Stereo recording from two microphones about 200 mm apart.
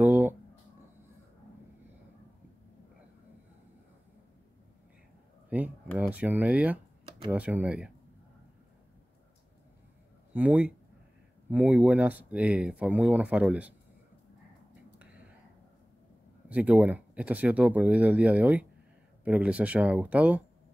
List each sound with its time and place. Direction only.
0.0 s a sound: 10° right (ahead or behind)
5.9 s speech: 10° right (ahead or behind)
10.3 s speech: 10° right (ahead or behind)
15.0 s whispering: 5° right (ahead or behind)
16.4 s speech: 5° right (ahead or behind)